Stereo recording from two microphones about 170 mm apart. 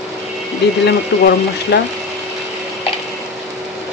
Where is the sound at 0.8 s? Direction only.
80° left.